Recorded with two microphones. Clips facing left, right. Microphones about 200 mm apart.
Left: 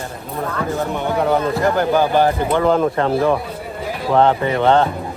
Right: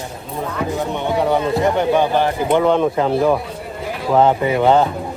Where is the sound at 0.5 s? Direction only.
15° right (ahead or behind).